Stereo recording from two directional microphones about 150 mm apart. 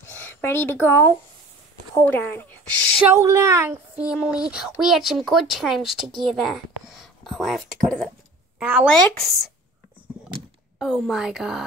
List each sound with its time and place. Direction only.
0.0 s a sound: 15° left (ahead or behind)
2.0 s speech: 15° left (ahead or behind)
3.2 s speech: 20° right (ahead or behind)
3.9 s speech: 5° right (ahead or behind)
8.5 s speech: 10° right (ahead or behind)
8.8 s speech: 5° left (ahead or behind)
10.8 s speech: centre (ahead or behind)